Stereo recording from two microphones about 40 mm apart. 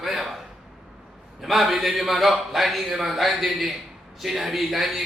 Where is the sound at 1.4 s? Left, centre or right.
Centre.